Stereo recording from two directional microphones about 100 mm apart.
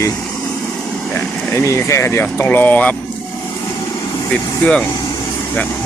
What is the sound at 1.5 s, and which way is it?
Speech, 30° left (ahead or behind).